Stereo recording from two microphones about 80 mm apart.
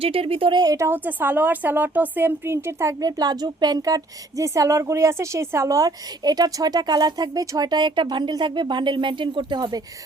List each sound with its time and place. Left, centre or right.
0.3 s speech: right
0.6 s a woman's voice: right
0.9 s a woman's voice: right
3.1 s speech: right